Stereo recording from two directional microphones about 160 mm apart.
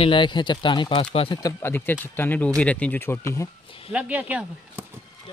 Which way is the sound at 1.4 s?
15° left (ahead or behind).